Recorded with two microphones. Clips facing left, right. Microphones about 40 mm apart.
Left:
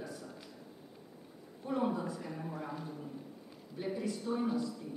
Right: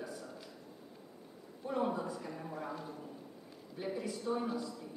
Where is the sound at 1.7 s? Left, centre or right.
Centre.